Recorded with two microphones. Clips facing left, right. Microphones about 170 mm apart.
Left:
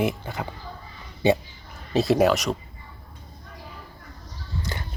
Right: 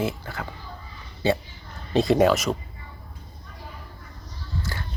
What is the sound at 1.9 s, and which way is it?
Speech, centre (ahead or behind).